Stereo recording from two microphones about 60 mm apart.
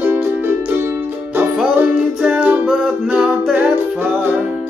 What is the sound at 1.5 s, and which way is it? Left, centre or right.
Music, centre.